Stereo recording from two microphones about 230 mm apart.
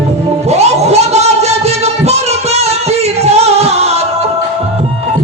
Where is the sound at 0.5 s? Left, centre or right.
Right.